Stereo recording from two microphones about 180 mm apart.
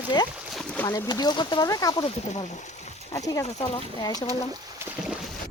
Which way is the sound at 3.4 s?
40° left (ahead or behind).